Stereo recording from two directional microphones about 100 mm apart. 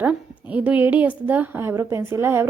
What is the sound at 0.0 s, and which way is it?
A woman's voice, 15° right (ahead or behind).